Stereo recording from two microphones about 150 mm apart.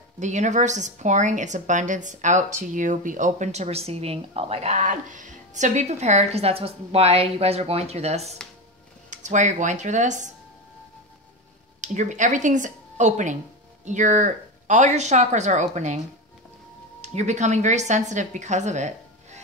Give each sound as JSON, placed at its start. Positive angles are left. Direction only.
{"t": 0.2, "sound": "a woman's voice", "side_deg": -50}
{"t": 11.8, "sound": "a woman's voice", "side_deg": -55}
{"t": 17.0, "sound": "a woman's voice", "side_deg": -50}